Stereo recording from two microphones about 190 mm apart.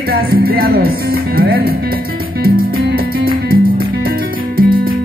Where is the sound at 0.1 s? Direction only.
50° right (ahead or behind).